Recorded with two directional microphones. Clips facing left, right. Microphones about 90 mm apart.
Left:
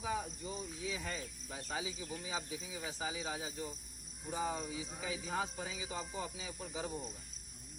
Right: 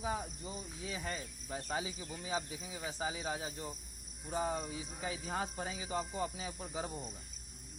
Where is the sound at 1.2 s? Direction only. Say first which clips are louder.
Right 3 dB; 35° right (ahead or behind).